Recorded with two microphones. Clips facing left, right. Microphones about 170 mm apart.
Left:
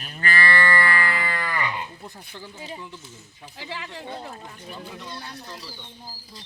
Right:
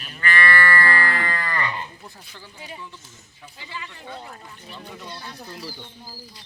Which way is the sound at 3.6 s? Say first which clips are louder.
Left 3 dB; 90° left.